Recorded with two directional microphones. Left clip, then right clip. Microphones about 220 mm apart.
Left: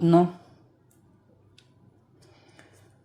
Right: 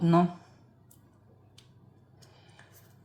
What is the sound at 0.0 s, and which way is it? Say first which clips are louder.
Speech: left 5 dB; 25° left (ahead or behind).